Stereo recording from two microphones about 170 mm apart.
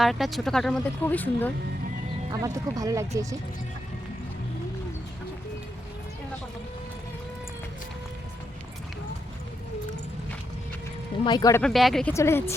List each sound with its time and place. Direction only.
0.0 s speech: centre (ahead or behind)
2.3 s speech: 20° right (ahead or behind)
11.3 s speech: 25° left (ahead or behind)
11.6 s speech: centre (ahead or behind)
12.1 s speech: 15° left (ahead or behind)